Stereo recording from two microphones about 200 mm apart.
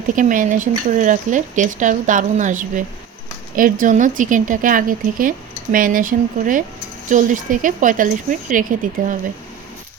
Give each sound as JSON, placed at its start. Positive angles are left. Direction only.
{"t": 0.2, "sound": "speech", "side_deg": -40}